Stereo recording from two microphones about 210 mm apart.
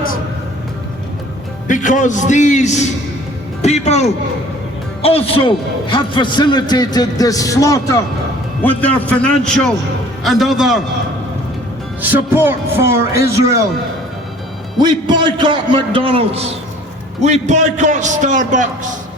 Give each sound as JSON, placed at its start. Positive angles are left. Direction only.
{"t": 1.6, "sound": "a man's voice", "side_deg": 35}
{"t": 12.0, "sound": "a man's voice", "side_deg": -10}
{"t": 14.8, "sound": "a man's voice", "side_deg": -20}